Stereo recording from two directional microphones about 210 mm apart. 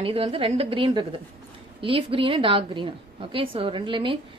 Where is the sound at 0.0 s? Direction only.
25° right (ahead or behind).